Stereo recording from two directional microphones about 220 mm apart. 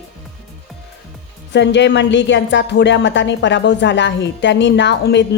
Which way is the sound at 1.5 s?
55° left (ahead or behind).